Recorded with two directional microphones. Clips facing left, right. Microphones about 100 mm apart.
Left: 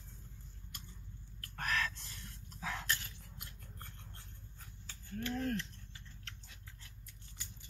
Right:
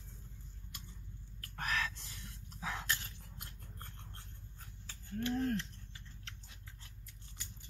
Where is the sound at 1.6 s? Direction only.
10° right (ahead or behind).